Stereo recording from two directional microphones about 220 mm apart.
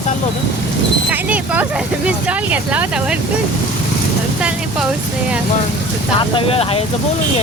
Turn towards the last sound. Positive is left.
turn(degrees=25)  # may be behind; listen again after turning